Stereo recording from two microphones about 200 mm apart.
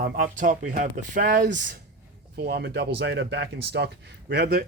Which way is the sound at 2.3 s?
50° right (ahead or behind).